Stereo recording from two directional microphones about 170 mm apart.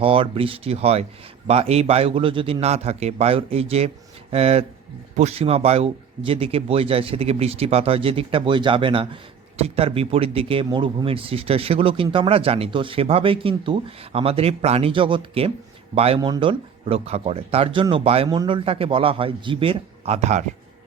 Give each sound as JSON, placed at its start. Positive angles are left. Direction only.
{"t": 0.0, "sound": "speech", "side_deg": -30}